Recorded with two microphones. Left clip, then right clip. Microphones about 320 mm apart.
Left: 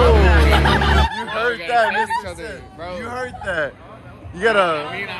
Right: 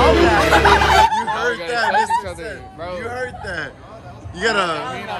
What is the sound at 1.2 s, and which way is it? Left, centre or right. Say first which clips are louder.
Speech: right 1 dB; centre.